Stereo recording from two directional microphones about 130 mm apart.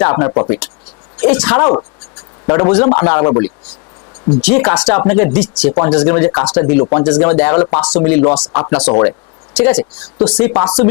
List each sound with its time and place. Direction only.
0.0 s speech: 25° left (ahead or behind)
1.2 s speech: 15° left (ahead or behind)
4.4 s speech: 15° left (ahead or behind)